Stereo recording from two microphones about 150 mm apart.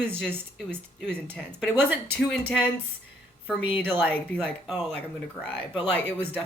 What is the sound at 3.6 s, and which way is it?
Speech, 10° right (ahead or behind).